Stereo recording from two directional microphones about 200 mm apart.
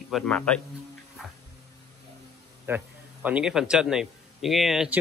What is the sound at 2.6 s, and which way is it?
A man's voice, 10° right (ahead or behind).